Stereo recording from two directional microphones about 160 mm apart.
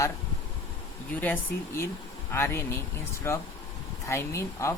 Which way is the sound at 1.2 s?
10° left (ahead or behind).